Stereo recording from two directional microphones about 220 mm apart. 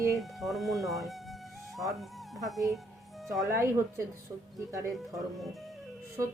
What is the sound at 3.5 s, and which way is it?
Speech, 10° right (ahead or behind).